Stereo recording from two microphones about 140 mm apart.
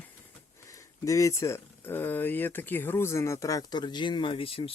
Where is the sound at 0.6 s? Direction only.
25° left (ahead or behind).